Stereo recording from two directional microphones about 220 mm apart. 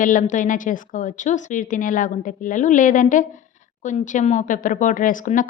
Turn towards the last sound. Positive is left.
turn(degrees=35)  # may be behind; listen again after turning